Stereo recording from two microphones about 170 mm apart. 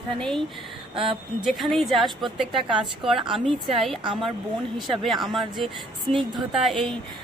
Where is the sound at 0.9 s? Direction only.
30° right (ahead or behind).